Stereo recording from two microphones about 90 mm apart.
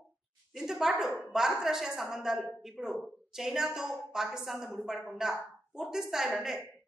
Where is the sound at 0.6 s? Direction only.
5° right (ahead or behind).